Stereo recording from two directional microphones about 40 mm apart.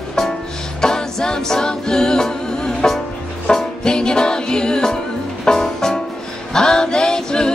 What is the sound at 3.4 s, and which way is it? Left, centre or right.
Music, centre.